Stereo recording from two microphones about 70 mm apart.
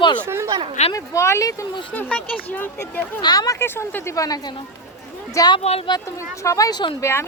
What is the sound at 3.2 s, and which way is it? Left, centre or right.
Speech, left.